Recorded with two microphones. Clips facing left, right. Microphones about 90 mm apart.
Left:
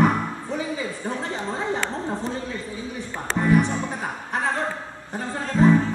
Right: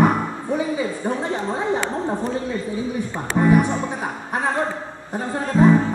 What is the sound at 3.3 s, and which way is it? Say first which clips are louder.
Speech: right 3 dB; 15° right (ahead or behind).